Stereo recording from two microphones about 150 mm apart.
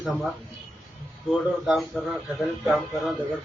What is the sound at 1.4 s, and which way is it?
A man's voice, 5° right (ahead or behind).